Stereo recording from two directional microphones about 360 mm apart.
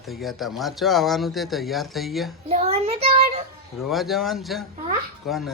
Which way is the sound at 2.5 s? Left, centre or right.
Centre.